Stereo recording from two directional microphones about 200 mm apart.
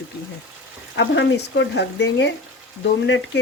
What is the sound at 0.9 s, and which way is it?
Speech, 65° left (ahead or behind).